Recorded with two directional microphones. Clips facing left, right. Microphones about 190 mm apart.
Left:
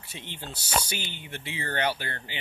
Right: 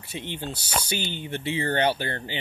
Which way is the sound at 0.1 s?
15° right (ahead or behind).